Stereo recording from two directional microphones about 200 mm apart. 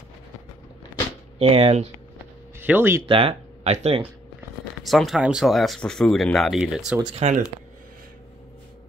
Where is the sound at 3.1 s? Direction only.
30° right (ahead or behind).